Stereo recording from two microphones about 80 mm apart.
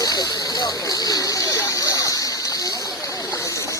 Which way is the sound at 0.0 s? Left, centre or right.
Left.